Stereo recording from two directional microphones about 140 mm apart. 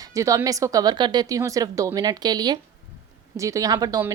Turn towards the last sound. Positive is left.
turn(degrees=-25)  # may be behind; listen again after turning